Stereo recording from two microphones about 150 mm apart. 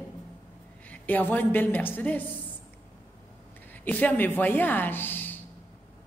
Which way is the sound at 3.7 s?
10° left (ahead or behind).